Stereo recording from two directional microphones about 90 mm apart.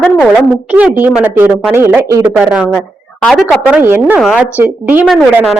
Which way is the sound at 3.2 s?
Centre (ahead or behind).